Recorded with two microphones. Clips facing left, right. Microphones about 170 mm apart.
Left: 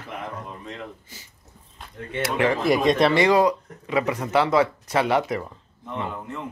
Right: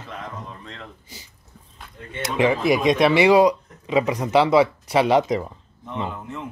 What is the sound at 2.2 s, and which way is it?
Speech, 15° right (ahead or behind).